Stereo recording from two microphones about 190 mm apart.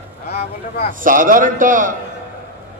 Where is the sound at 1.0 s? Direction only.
45° right (ahead or behind).